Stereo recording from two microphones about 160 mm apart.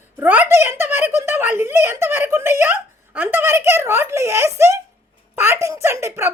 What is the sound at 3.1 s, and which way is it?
Speech, 10° right (ahead or behind).